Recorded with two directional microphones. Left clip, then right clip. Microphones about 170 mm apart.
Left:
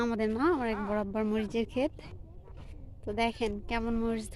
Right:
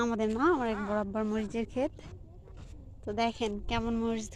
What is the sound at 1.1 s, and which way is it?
Speech, 10° left (ahead or behind).